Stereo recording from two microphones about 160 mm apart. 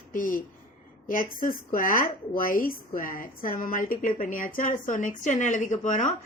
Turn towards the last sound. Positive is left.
turn(degrees=50)  # may be behind; listen again after turning